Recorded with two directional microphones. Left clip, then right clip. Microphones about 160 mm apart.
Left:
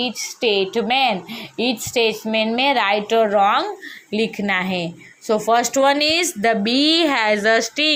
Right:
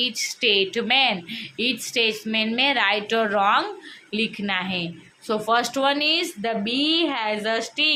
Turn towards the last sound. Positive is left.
turn(degrees=35)  # may be behind; listen again after turning